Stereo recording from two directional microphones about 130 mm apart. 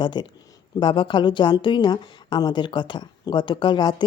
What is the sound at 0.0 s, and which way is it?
A woman's voice, 35° left (ahead or behind).